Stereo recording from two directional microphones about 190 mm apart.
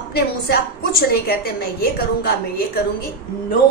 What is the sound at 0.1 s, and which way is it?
A woman's voice, 55° left (ahead or behind).